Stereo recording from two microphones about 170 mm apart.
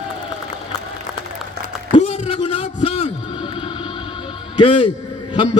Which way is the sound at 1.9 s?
35° left (ahead or behind).